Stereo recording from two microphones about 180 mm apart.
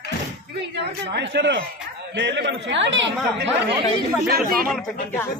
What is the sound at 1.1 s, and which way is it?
A man's voice, 70° right (ahead or behind).